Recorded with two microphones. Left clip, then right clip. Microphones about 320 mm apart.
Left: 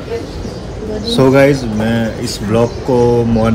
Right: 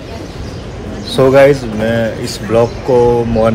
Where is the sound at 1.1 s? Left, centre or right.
Centre.